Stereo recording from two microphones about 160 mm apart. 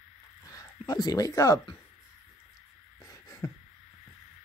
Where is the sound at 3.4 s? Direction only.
20° left (ahead or behind).